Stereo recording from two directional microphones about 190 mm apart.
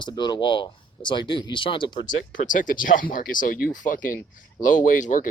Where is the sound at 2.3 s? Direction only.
45° left (ahead or behind).